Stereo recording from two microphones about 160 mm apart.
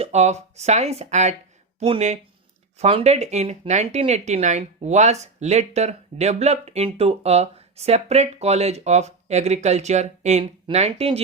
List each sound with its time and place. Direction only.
0.0 s speech: 45° right (ahead or behind)